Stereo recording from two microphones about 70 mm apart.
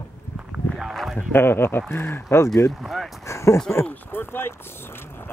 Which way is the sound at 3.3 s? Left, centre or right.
Left.